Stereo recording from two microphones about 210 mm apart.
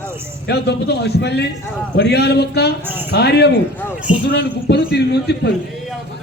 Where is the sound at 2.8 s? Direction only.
10° right (ahead or behind).